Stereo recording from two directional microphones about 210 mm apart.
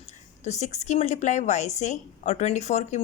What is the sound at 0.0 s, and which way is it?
A woman's voice, 30° left (ahead or behind).